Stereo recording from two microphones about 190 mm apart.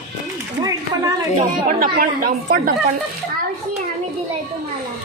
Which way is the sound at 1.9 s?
50° right (ahead or behind).